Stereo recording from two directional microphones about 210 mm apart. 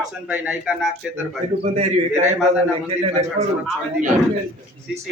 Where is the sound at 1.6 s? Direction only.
30° right (ahead or behind).